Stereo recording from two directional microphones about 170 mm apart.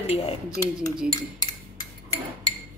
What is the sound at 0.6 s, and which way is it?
Speech, 5° right (ahead or behind).